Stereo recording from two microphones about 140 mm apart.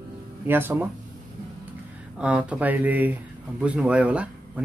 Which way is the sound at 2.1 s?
10° right (ahead or behind).